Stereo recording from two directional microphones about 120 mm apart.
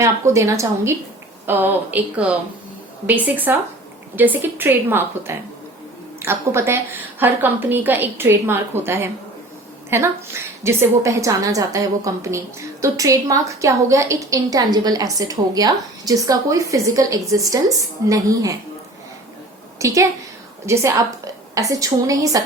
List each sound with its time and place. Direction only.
0.0 s a woman's voice: 25° right (ahead or behind)
19.8 s a woman's voice: 25° right (ahead or behind)